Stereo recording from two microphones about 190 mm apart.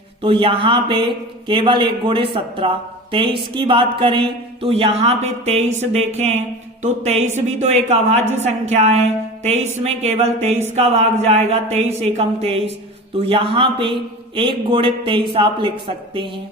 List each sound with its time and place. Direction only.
0.2 s a man's voice: 25° right (ahead or behind)